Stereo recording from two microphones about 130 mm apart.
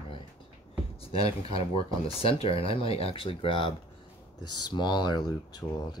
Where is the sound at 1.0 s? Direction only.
50° left (ahead or behind).